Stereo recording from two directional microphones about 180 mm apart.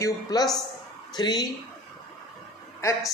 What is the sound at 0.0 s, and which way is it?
Speech, 20° left (ahead or behind).